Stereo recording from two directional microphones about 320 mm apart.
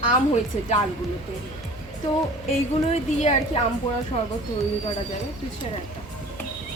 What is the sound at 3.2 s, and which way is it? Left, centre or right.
Speech, centre.